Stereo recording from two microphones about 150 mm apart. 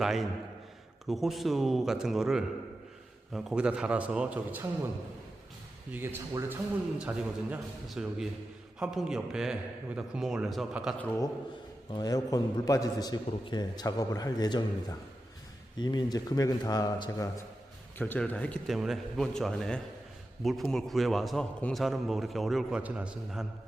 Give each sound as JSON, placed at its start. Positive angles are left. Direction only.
{"t": 0.0, "sound": "a man's voice", "side_deg": 0}
{"t": 5.9, "sound": "a man's voice", "side_deg": -15}
{"t": 11.9, "sound": "a man's voice", "side_deg": 25}
{"t": 17.9, "sound": "speech", "side_deg": 10}
{"t": 18.7, "sound": "a man's voice", "side_deg": 0}